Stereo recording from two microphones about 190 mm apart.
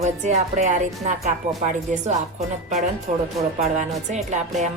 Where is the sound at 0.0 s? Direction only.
40° right (ahead or behind).